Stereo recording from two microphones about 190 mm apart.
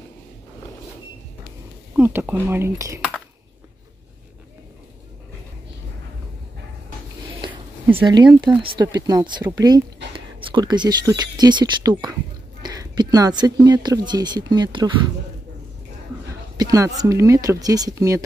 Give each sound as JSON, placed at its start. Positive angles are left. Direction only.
{"t": 2.0, "sound": "speech", "side_deg": -10}
{"t": 8.0, "sound": "speech", "side_deg": -20}
{"t": 16.5, "sound": "speech", "side_deg": -15}